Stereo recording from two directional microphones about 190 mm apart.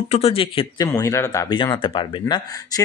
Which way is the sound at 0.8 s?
15° left (ahead or behind).